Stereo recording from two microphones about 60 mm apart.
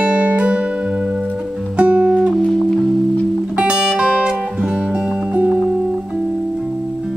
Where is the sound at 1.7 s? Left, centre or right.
Right.